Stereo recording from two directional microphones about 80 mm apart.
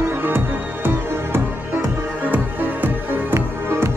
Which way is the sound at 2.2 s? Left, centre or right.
Right.